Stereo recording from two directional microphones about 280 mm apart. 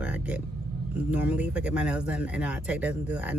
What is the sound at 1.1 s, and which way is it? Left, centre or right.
Speech, centre.